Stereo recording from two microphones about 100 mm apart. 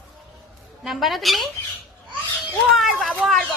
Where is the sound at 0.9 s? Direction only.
Centre (ahead or behind).